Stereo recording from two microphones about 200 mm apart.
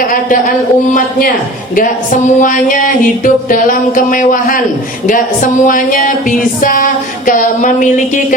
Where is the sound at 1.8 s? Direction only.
40° left (ahead or behind).